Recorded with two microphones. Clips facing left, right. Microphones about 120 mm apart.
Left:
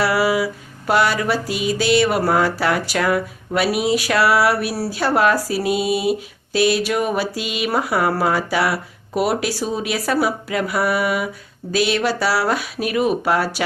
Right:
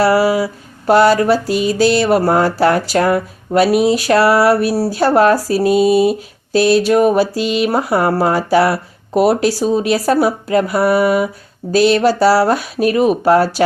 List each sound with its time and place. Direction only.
0.0 s speech: 35° right (ahead or behind)